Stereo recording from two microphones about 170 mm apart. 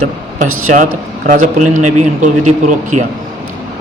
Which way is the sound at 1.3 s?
50° right (ahead or behind).